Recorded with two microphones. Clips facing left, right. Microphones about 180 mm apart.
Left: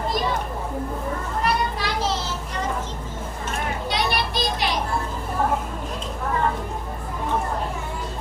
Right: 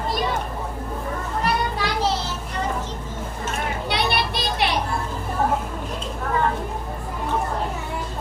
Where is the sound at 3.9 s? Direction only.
65° right (ahead or behind).